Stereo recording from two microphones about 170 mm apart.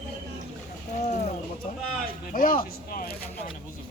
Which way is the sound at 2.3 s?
55° left (ahead or behind).